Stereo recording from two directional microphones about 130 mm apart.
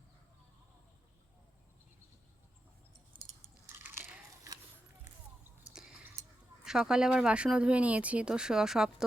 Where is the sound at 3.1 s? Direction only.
40° right (ahead or behind).